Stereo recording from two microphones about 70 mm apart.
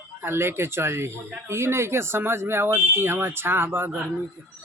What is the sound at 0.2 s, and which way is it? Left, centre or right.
Speech, right.